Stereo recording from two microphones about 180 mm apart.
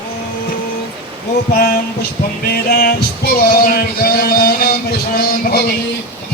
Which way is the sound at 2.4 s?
55° left (ahead or behind).